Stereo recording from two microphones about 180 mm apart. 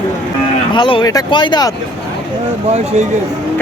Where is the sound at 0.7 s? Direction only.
25° left (ahead or behind).